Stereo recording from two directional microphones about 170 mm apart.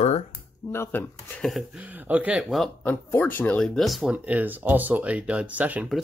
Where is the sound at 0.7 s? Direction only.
15° left (ahead or behind).